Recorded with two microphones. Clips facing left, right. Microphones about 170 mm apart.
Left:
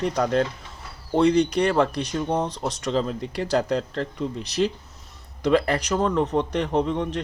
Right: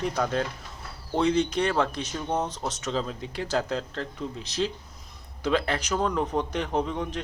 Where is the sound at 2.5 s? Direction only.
35° left (ahead or behind).